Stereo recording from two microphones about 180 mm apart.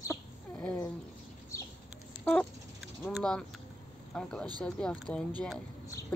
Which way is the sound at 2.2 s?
5° left (ahead or behind).